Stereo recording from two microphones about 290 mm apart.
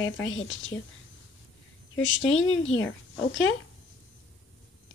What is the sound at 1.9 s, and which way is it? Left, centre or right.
A woman's voice, left.